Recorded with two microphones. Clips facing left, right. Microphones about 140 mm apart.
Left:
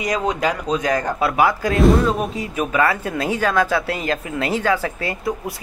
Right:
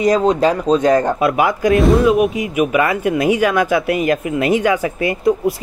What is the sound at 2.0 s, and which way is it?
Speech, 10° right (ahead or behind).